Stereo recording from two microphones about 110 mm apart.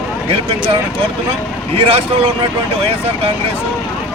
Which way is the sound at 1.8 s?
60° right (ahead or behind).